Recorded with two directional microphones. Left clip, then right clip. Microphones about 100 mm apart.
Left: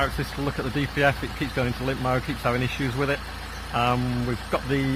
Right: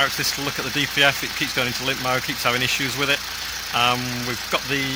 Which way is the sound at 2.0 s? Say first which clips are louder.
Right 2 dB; 40° right (ahead or behind).